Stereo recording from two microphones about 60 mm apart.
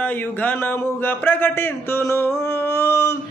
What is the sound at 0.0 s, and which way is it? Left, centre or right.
Mantra, left.